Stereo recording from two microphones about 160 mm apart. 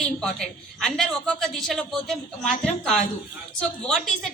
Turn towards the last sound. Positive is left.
turn(degrees=5)  # may be behind; listen again after turning